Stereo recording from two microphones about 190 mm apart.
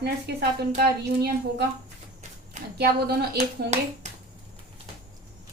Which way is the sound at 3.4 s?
40° right (ahead or behind).